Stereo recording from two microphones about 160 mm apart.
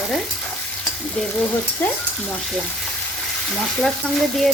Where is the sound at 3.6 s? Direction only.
Centre (ahead or behind).